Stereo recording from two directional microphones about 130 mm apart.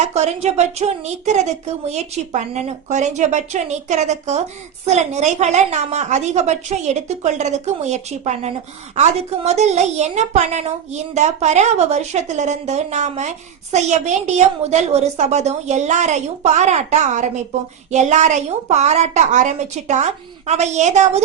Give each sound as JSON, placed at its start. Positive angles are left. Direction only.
{"t": 0.0, "sound": "a woman's voice", "side_deg": -55}